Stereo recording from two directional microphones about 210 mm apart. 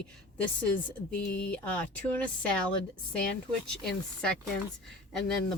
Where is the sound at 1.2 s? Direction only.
50° left (ahead or behind).